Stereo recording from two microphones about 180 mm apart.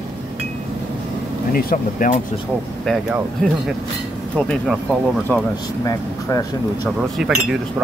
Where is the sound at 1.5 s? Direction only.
55° left (ahead or behind).